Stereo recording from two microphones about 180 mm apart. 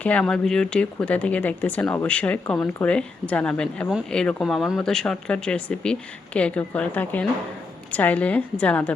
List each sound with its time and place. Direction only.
0.0 s speech: 5° left (ahead or behind)